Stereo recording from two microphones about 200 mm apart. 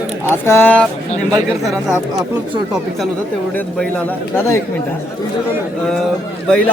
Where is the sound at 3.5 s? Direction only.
5° left (ahead or behind).